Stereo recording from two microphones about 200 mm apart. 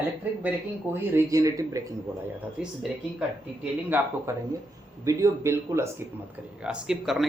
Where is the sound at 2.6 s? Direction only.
5° right (ahead or behind).